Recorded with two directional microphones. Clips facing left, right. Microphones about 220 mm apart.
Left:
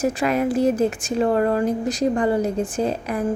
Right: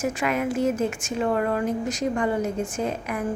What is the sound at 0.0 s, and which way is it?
A woman's voice, 35° left (ahead or behind).